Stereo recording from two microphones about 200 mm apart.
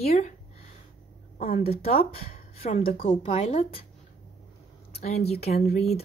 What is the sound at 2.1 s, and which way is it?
Speech, 45° left (ahead or behind).